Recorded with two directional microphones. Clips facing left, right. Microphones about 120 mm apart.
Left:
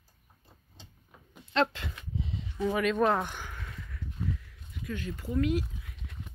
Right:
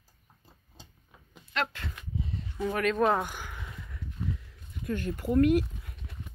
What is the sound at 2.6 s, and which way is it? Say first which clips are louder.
Speech: even; centre (ahead or behind).